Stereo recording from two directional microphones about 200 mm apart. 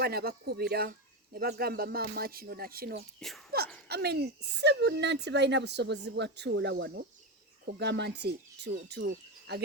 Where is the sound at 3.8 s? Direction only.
55° right (ahead or behind).